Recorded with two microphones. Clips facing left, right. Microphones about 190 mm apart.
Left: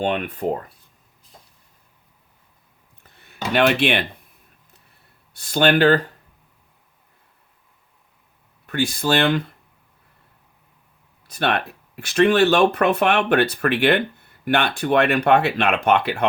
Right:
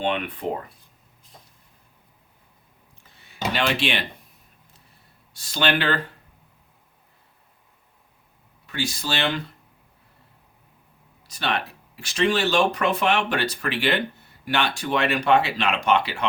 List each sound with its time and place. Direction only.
0.0 s speech: 45° left (ahead or behind)
3.0 s a sound: 55° left (ahead or behind)
5.3 s speech: 55° left (ahead or behind)
8.6 s speech: 55° left (ahead or behind)
11.3 s speech: 55° left (ahead or behind)